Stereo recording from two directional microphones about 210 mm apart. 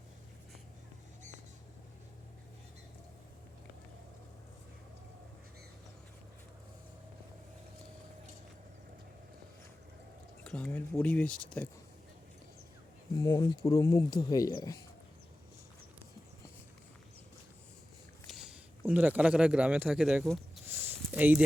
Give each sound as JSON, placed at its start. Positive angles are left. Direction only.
{"t": 10.4, "sound": "speech", "side_deg": 5}
{"t": 13.1, "sound": "speech", "side_deg": 15}
{"t": 18.3, "sound": "speech", "side_deg": 0}
{"t": 20.7, "sound": "a sound", "side_deg": -10}